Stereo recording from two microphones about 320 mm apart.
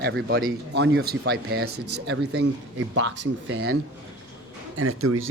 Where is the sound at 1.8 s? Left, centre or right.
Right.